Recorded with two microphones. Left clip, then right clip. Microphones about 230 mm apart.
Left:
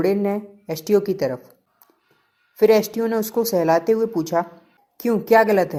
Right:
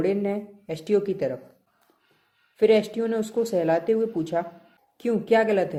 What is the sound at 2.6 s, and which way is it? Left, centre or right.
Speech, left.